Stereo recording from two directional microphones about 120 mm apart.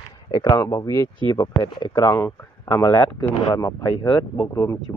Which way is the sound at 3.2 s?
30° left (ahead or behind).